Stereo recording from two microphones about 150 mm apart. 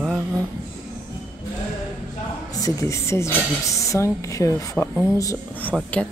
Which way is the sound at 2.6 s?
20° left (ahead or behind).